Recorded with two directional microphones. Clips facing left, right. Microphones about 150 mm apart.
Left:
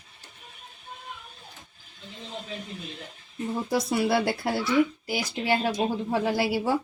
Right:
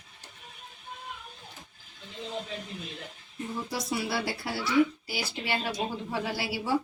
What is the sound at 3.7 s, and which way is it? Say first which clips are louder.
Speech: left 9 dB; 50° left (ahead or behind).